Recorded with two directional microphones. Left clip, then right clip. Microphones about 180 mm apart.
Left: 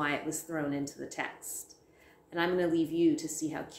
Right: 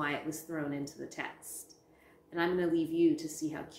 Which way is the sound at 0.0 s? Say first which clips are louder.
Left 3 dB; 15° left (ahead or behind).